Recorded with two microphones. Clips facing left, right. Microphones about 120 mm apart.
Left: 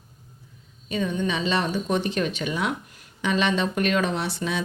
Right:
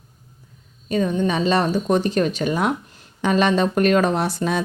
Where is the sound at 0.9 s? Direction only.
40° right (ahead or behind).